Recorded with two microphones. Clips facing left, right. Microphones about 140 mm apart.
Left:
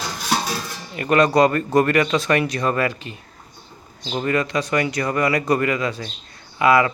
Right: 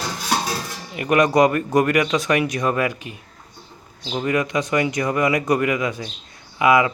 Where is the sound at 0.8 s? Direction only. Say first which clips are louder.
Left 1 dB; 15° right (ahead or behind).